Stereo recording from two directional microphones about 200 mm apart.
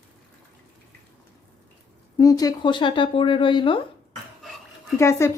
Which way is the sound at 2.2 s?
20° left (ahead or behind).